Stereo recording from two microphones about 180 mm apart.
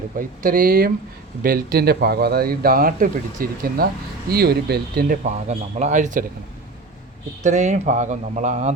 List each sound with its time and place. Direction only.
0.2 s speech: 50° right (ahead or behind)
7.4 s speech: 40° right (ahead or behind)